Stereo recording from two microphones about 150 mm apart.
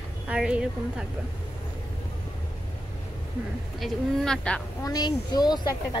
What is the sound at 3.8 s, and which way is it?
Speech, 5° left (ahead or behind).